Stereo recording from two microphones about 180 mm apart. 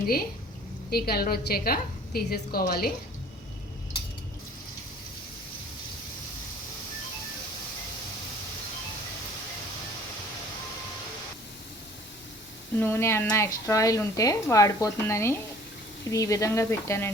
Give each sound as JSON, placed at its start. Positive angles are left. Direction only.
{"t": 0.9, "sound": "a woman's voice", "side_deg": 60}
{"t": 12.8, "sound": "a woman's voice", "side_deg": 15}